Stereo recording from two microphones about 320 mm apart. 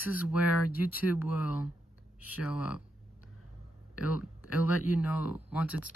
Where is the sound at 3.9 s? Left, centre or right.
Left.